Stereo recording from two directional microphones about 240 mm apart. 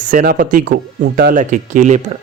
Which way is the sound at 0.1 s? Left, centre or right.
Right.